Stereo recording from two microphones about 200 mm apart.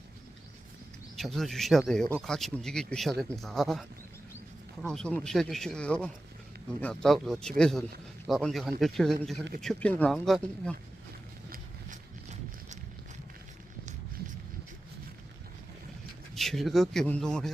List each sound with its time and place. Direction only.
1.1 s speech: centre (ahead or behind)
11.4 s horse: 45° right (ahead or behind)
16.3 s speech: centre (ahead or behind)